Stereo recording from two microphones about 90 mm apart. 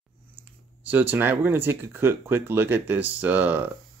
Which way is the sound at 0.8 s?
20° right (ahead or behind).